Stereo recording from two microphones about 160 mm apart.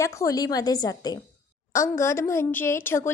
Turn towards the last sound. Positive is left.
turn(degrees=15)  # may be behind; listen again after turning